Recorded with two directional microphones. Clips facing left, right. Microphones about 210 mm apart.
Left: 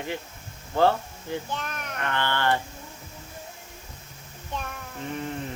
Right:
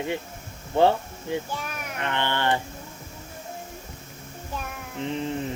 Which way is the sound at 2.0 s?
20° right (ahead or behind).